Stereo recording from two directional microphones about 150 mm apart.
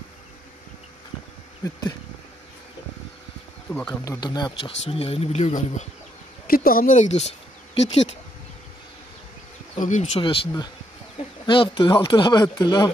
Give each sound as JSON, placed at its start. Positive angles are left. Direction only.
{"t": 1.6, "sound": "speech", "side_deg": 25}
{"t": 3.7, "sound": "speech", "side_deg": 10}
{"t": 4.0, "sound": "speech", "side_deg": 25}
{"t": 6.4, "sound": "speech", "side_deg": 75}
{"t": 9.8, "sound": "speech", "side_deg": 55}
{"t": 10.2, "sound": "speech", "side_deg": 35}